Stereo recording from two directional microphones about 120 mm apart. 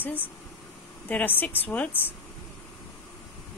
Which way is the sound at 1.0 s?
15° left (ahead or behind).